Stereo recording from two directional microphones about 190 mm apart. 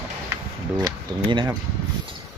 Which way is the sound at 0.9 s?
25° right (ahead or behind).